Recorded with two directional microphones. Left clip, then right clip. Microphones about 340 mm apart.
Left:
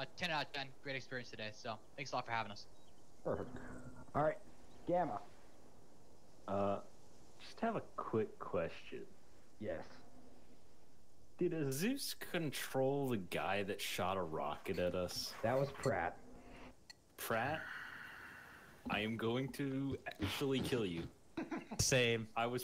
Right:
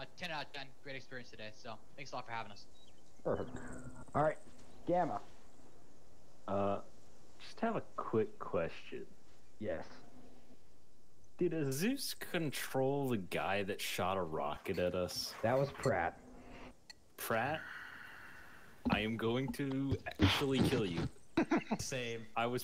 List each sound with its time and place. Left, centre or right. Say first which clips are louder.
0.0 s a man's voice: left 3 dB; centre
3.3 s speech: right 3 dB; centre
6.4 s speech: right 2 dB; centre
11.3 s speech: right 2 dB; centre
17.6 s a sound: even; centre
18.9 s speech: right 1 dB; centre
20.9 s speech: right 8 dB; right
21.7 s speech: left 7 dB; left
22.3 s speech: right 2 dB; centre